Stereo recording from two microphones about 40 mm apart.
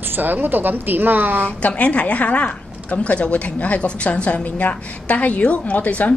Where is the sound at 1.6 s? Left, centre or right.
Left.